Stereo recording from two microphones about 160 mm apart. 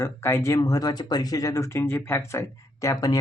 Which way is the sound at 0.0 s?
15° left (ahead or behind).